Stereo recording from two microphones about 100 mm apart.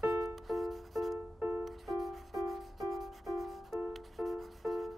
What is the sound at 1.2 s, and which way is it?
Music, 25° right (ahead or behind).